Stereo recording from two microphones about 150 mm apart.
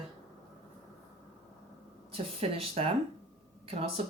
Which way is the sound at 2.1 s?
40° right (ahead or behind).